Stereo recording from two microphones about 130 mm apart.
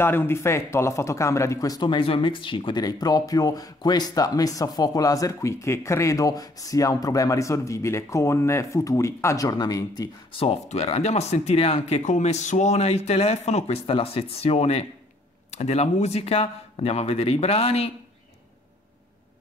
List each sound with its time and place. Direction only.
0.0 s speech: 15° left (ahead or behind)
10.3 s a man's voice: 50° left (ahead or behind)